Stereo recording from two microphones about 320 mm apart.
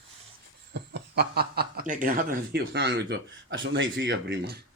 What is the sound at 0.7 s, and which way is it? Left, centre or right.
Speech, right.